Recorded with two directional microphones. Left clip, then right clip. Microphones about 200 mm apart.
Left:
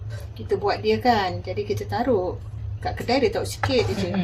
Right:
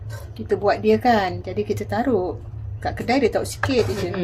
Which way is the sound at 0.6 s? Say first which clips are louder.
Right 3 dB; 35° right (ahead or behind).